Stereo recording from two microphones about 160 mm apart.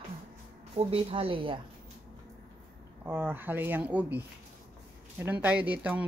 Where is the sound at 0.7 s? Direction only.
35° right (ahead or behind).